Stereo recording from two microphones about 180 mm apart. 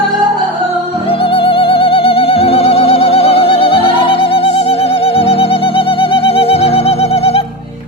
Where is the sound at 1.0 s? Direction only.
30° left (ahead or behind).